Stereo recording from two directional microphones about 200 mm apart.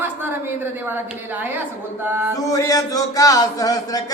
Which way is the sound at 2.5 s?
15° left (ahead or behind).